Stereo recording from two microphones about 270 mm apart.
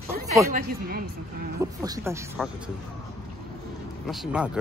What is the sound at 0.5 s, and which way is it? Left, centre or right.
Speech, right.